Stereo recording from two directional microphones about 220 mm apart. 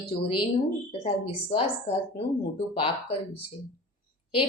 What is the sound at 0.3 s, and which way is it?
A woman's voice, 25° left (ahead or behind).